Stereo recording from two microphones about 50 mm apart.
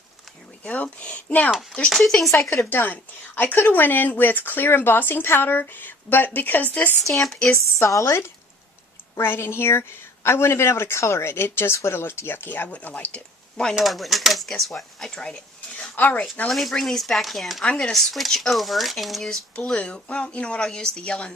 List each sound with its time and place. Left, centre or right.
0.6 s speech: left
1.9 s speech: centre
2.6 s speech: left
7.0 s speech: centre
7.8 s speech: left
9.2 s speech: left
12.6 s speech: left
13.8 s speech: centre
16.0 s speech: left
16.5 s speech: centre
17.6 s speech: centre
17.9 s speech: centre
19.7 s speech: left